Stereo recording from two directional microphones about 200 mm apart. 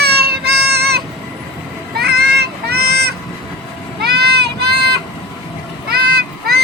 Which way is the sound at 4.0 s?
55° right (ahead or behind).